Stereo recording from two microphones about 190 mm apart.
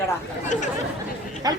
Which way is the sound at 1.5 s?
20° right (ahead or behind).